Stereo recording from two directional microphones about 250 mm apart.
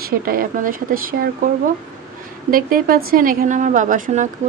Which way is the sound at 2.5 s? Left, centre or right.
Right.